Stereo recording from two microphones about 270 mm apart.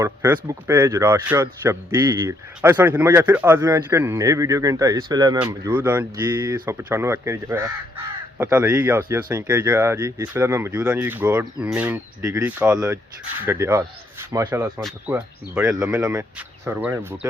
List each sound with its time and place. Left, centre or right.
0.0 s speech: centre